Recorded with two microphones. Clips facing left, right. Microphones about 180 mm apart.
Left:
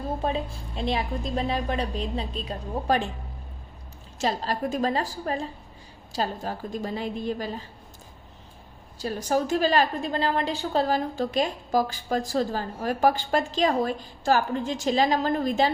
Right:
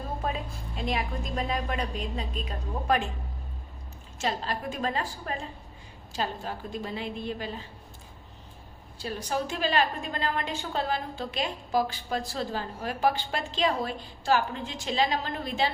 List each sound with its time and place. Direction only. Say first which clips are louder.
0.2 s a woman's voice: left 5 dB; 30° left (ahead or behind)
4.2 s a woman's voice: left 4 dB; 40° left (ahead or behind)
9.0 s a woman's voice: left 5 dB; 40° left (ahead or behind)